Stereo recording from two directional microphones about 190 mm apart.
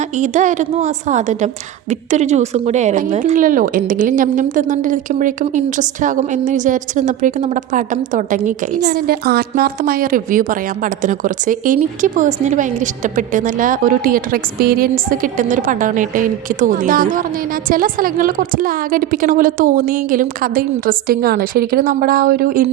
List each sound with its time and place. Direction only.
0.2 s a woman's voice: 40° right (ahead or behind)